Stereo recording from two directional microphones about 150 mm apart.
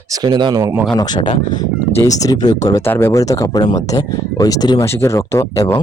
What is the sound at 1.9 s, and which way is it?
Speech, 20° left (ahead or behind).